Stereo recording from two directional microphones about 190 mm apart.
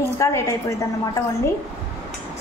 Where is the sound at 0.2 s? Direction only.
15° left (ahead or behind).